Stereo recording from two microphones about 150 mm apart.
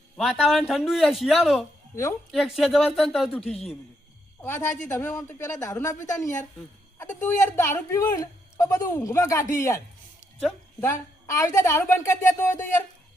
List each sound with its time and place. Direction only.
0.2 s speech: centre (ahead or behind)
4.4 s speech: 15° left (ahead or behind)
11.3 s speech: 20° left (ahead or behind)